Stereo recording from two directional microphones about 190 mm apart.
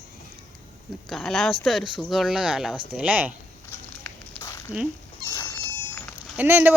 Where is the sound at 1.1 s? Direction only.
Centre (ahead or behind).